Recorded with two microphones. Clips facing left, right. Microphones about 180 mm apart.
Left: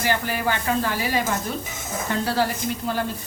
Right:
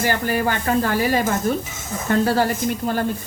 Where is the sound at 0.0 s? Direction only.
50° right (ahead or behind).